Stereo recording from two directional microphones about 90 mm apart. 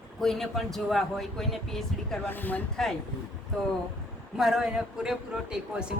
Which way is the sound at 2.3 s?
20° left (ahead or behind).